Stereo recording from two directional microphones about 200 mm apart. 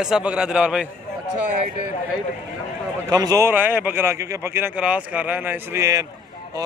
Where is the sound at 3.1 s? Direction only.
20° right (ahead or behind).